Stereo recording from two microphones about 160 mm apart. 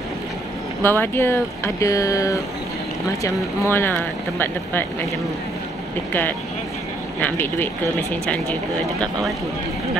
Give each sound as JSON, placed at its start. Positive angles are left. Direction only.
{"t": 0.8, "sound": "speech", "side_deg": 15}
{"t": 7.2, "sound": "speech", "side_deg": 10}